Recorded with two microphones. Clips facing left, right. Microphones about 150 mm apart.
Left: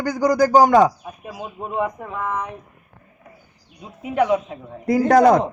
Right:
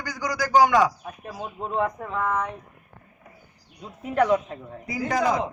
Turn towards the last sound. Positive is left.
turn(degrees=70)  # may be behind; listen again after turning